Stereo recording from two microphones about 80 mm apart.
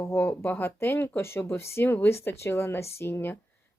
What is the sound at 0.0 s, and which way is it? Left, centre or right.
Speech, left.